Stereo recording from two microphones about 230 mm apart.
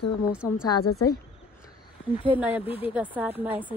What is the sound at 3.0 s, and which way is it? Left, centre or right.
Speech, centre.